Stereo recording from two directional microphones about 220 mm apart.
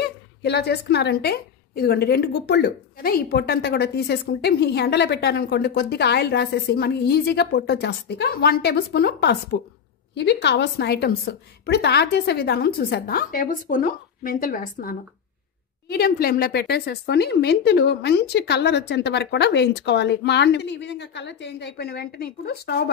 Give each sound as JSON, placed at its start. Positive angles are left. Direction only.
{"t": 0.4, "sound": "a woman's voice", "side_deg": 50}